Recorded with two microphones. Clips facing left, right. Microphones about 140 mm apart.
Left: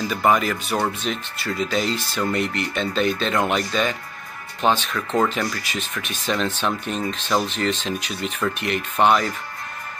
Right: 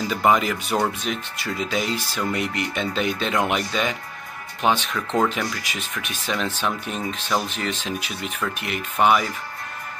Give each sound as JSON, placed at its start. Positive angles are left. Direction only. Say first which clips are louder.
{"t": 0.1, "sound": "speech", "louder": "even", "side_deg": -20}